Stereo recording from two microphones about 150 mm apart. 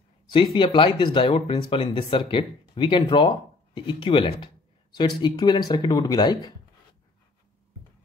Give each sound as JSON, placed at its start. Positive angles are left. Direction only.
{"t": 0.3, "sound": "speech", "side_deg": 35}